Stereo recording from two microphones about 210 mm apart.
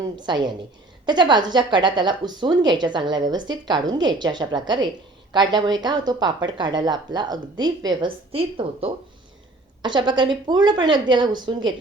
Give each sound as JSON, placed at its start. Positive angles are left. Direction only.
{"t": 0.0, "sound": "speech", "side_deg": -20}